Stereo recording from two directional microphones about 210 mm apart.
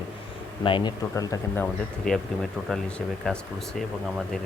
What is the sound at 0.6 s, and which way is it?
Speech, 25° left (ahead or behind).